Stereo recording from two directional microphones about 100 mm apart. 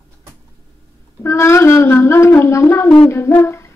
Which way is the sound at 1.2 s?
25° left (ahead or behind).